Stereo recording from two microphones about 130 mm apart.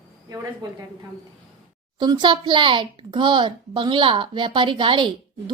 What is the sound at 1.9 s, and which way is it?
A child's voice, 35° right (ahead or behind).